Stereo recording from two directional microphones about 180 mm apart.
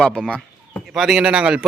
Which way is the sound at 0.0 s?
5° left (ahead or behind).